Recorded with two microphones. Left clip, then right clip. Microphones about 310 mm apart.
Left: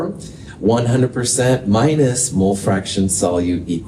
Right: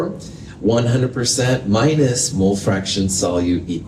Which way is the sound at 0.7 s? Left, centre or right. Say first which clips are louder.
Left 1 dB; left.